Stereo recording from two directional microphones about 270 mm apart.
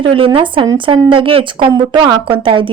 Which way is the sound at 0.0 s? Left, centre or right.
Centre.